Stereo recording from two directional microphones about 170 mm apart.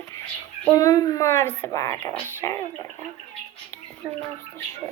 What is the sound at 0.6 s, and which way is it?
Speech, 20° left (ahead or behind).